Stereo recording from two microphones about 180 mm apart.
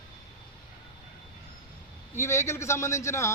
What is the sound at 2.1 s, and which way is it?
A man's voice, 15° left (ahead or behind).